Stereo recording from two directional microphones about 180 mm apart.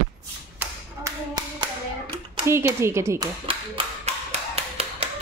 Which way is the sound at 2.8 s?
15° right (ahead or behind).